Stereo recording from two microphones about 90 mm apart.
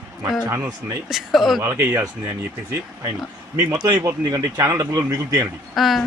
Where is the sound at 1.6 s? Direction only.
30° right (ahead or behind).